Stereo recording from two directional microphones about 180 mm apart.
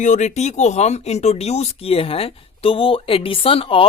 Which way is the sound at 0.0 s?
40° left (ahead or behind).